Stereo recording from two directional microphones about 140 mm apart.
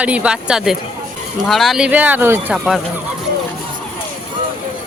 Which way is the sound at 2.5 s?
Centre (ahead or behind).